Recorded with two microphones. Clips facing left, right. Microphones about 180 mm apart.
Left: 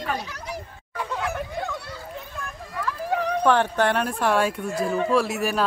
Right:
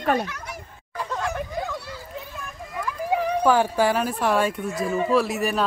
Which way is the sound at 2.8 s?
10° right (ahead or behind).